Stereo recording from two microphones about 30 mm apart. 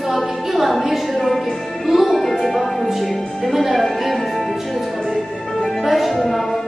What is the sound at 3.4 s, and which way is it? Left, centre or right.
Speech, centre.